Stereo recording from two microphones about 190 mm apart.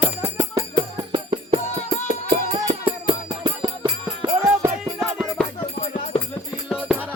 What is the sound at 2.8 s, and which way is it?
Music, 25° right (ahead or behind).